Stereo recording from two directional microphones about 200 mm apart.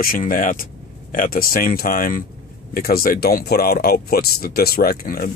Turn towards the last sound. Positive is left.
turn(degrees=45)  # may be behind; listen again after turning